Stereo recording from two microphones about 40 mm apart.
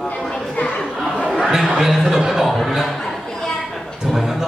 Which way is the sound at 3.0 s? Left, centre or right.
Centre.